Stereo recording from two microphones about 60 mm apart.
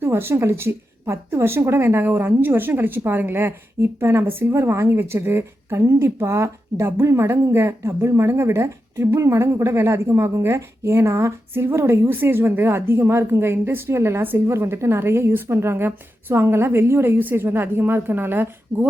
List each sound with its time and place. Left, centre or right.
0.0 s a woman's voice: right